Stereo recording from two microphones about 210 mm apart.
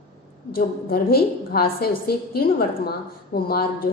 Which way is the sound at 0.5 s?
45° left (ahead or behind).